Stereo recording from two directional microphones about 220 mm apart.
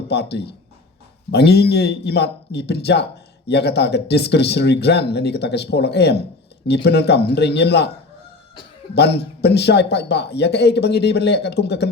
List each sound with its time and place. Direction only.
0.1 s speech: 50° left (ahead or behind)
9.0 s speech: 50° left (ahead or behind)